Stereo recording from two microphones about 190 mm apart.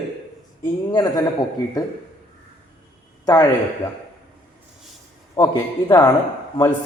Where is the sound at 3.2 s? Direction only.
20° left (ahead or behind).